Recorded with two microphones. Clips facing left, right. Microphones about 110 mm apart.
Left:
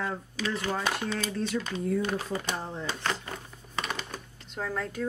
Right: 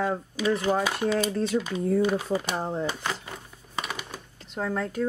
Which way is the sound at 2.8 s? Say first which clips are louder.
Right 2 dB; 10° right (ahead or behind).